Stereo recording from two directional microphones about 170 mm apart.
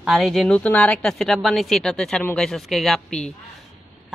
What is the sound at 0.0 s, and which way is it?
Speech, centre (ahead or behind).